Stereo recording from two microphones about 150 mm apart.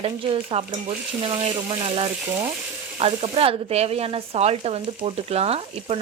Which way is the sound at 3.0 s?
40° right (ahead or behind).